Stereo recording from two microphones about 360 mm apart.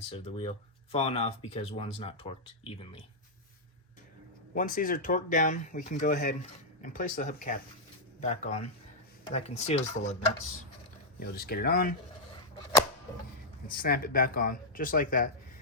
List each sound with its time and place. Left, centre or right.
0.1 s speech: centre
4.5 s speech: left
11.2 s speech: left
13.7 s speech: left